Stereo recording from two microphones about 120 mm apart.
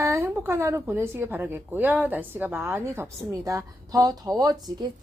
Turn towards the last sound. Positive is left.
turn(degrees=-30)  # may be behind; listen again after turning